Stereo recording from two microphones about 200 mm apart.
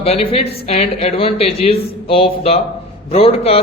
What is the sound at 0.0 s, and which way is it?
Speech, 30° left (ahead or behind).